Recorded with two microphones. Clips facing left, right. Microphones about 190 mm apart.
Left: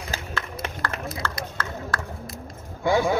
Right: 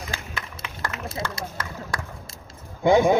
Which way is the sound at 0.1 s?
40° left (ahead or behind).